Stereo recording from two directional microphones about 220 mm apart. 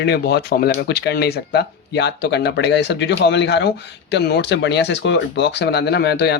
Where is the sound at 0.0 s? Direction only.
50° left (ahead or behind).